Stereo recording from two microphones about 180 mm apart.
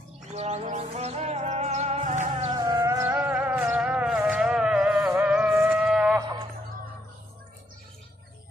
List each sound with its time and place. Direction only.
0.3 s music: 40° right (ahead or behind)
2.5 s music: 20° right (ahead or behind); by 6.1 s 5° right (ahead or behind)